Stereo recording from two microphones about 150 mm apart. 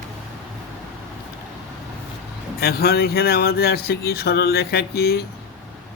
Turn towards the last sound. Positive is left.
turn(degrees=90)